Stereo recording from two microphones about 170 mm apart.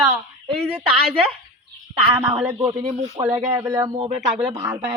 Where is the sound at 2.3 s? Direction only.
10° right (ahead or behind).